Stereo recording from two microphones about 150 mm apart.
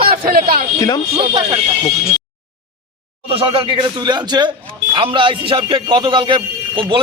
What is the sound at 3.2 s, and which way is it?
A man's voice, 40° right (ahead or behind).